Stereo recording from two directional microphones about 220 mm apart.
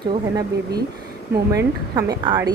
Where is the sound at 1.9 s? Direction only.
20° right (ahead or behind).